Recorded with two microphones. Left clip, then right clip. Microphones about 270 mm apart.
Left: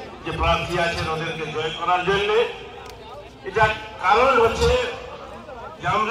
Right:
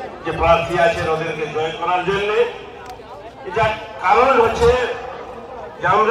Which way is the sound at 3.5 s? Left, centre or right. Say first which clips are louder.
Right 1 dB; centre.